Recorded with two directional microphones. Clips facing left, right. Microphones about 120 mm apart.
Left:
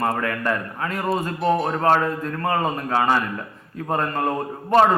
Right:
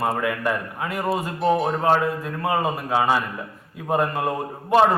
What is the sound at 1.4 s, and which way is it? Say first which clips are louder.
Speech: right 1 dB; centre (ahead or behind).